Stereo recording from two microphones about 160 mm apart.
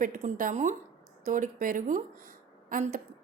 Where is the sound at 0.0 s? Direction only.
55° right (ahead or behind).